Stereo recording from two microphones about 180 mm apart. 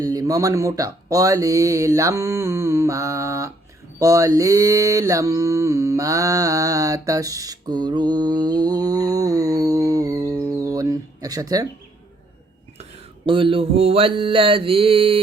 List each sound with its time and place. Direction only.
0.0 s speech: 20° right (ahead or behind)
4.0 s mantra: 20° right (ahead or behind)
13.2 s mantra: 30° right (ahead or behind)